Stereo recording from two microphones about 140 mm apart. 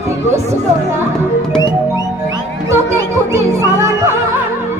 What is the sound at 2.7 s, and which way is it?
Music, 20° right (ahead or behind).